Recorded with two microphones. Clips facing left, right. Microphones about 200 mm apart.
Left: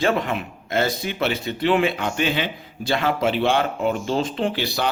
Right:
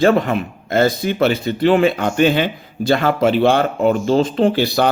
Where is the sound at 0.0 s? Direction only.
40° right (ahead or behind).